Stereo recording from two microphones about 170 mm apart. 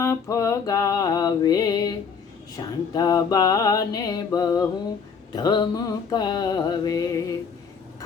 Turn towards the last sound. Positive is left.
turn(degrees=20)  # may be behind; listen again after turning